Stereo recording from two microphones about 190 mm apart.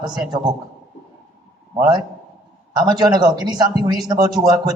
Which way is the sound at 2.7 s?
20° right (ahead or behind).